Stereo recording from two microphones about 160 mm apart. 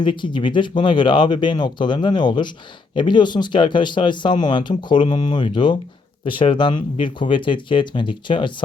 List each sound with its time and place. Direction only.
0.0 s speech: 30° left (ahead or behind)